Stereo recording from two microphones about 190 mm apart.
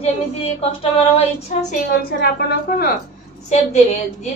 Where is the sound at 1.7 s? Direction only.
55° left (ahead or behind).